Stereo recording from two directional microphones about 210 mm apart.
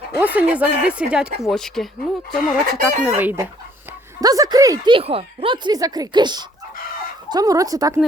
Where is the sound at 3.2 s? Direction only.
10° right (ahead or behind).